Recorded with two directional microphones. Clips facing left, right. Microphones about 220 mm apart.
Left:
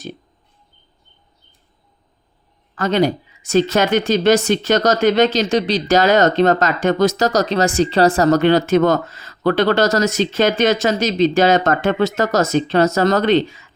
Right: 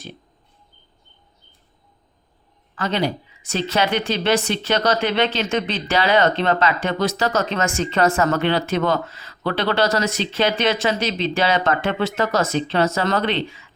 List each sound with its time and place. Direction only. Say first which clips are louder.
2.7 s speech: left 6 dB; 45° left (ahead or behind)